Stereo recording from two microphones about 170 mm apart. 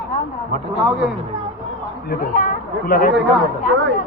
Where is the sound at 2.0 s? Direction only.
55° left (ahead or behind).